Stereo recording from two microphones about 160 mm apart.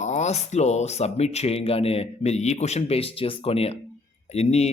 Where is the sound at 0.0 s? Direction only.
45° left (ahead or behind).